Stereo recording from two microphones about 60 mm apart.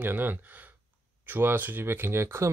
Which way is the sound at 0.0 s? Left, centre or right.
Right.